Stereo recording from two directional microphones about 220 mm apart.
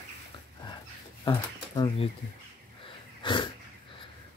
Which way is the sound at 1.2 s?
20° left (ahead or behind).